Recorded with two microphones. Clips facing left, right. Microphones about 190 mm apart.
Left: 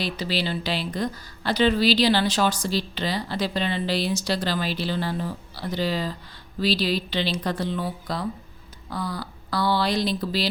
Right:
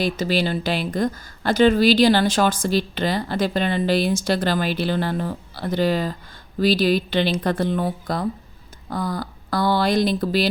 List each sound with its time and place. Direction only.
0.0 s speech: 50° right (ahead or behind)